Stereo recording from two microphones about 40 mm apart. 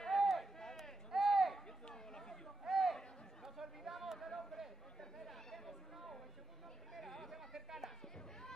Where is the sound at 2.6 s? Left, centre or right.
Centre.